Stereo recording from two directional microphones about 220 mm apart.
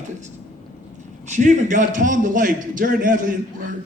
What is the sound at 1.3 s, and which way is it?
A man's voice, 35° right (ahead or behind).